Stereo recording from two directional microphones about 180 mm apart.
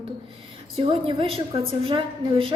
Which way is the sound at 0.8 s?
30° right (ahead or behind).